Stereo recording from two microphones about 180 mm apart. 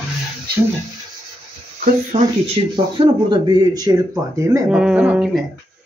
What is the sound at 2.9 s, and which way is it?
Speech, 25° right (ahead or behind).